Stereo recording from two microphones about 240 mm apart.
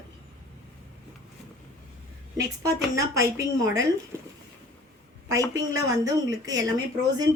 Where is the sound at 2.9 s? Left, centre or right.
Centre.